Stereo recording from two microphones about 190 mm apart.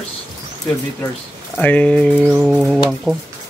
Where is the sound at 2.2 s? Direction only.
5° right (ahead or behind).